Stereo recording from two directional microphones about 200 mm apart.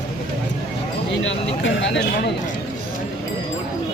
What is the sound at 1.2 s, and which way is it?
Speech, 70° left (ahead or behind).